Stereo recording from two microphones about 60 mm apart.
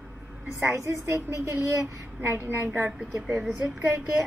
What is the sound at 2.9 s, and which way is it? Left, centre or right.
Speech, centre.